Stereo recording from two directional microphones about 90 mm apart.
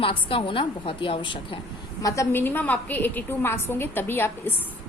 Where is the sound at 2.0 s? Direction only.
35° left (ahead or behind).